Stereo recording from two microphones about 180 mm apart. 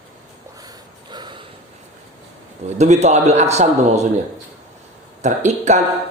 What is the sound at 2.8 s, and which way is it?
Speech, 40° right (ahead or behind).